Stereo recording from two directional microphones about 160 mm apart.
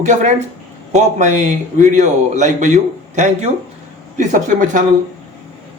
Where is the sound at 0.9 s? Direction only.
45° right (ahead or behind).